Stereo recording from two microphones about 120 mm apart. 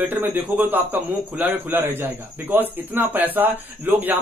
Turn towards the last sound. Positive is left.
turn(degrees=-15)  # may be behind; listen again after turning